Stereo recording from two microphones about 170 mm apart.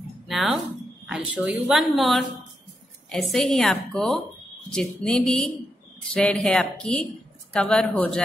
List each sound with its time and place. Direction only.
0.3 s speech: centre (ahead or behind)